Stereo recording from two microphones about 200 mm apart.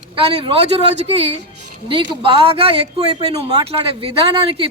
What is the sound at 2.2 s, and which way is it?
Speech, 25° right (ahead or behind).